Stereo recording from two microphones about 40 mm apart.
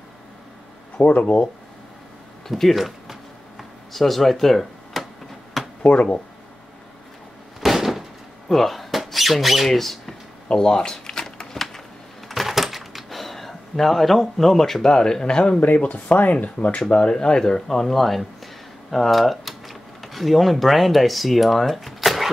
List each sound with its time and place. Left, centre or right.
1.0 s speech: left
2.4 s a sound: centre
5.8 s speech: left
7.6 s a sound: centre
8.5 s speech: centre
10.5 s shuffling cards: centre
12.3 s a sound: centre; by 15.6 s left
15.8 s speech: left
16.4 s speech: left
16.8 s speech: left; by 22.3 s centre